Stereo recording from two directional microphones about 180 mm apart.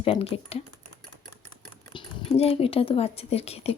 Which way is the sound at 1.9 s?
30° left (ahead or behind).